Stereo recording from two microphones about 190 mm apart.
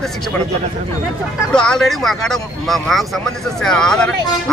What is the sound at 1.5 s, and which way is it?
A man's voice, 5° left (ahead or behind).